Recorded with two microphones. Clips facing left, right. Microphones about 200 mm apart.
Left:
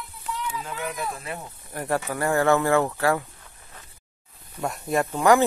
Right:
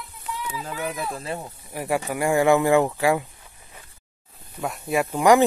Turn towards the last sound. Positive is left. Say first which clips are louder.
# right 2 dB
turn(degrees=-15)  # may be behind; listen again after turning